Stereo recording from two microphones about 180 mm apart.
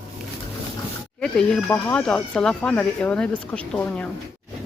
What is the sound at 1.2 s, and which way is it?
Speech, 5° left (ahead or behind).